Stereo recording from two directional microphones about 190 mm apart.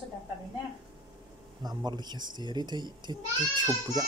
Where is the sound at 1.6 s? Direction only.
20° right (ahead or behind).